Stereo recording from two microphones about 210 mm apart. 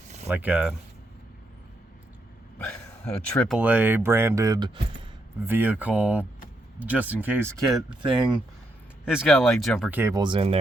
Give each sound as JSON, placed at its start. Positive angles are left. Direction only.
{"t": 0.3, "sound": "speech", "side_deg": -10}
{"t": 2.6, "sound": "speech", "side_deg": 10}
{"t": 3.6, "sound": "speech", "side_deg": -5}
{"t": 5.5, "sound": "speech", "side_deg": -10}
{"t": 9.0, "sound": "speech", "side_deg": -5}